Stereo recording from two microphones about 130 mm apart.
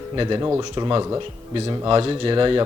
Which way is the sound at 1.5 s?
40° right (ahead or behind).